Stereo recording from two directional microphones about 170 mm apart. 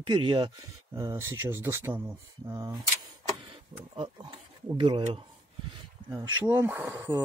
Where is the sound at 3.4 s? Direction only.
30° right (ahead or behind).